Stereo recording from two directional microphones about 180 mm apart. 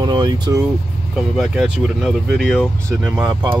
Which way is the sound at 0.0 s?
25° right (ahead or behind).